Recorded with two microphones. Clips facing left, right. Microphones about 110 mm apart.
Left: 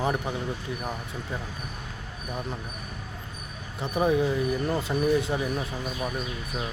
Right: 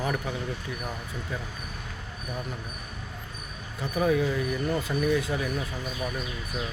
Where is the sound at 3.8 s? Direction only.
25° left (ahead or behind).